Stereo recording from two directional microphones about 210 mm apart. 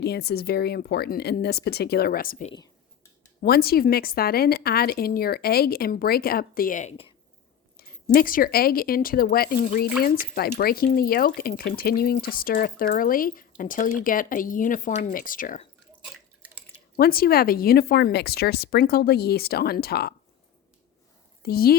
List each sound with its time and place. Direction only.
0.0 s a woman's voice: 50° left (ahead or behind); by 7.1 s 30° left (ahead or behind)
8.0 s a woman's voice: 40° left (ahead or behind)
10.6 s a woman's voice: 45° left (ahead or behind)
17.0 s a woman's voice: 45° left (ahead or behind)
21.4 s a woman's voice: 45° left (ahead or behind)